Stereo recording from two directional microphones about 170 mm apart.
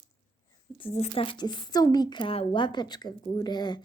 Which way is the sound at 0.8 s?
35° left (ahead or behind).